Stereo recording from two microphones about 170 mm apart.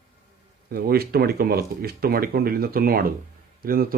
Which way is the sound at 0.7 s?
60° right (ahead or behind).